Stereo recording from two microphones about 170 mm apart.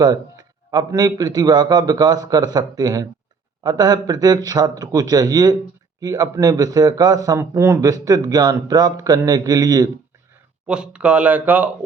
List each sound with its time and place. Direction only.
0.7 s speech: 25° right (ahead or behind)
10.7 s speech: 5° right (ahead or behind)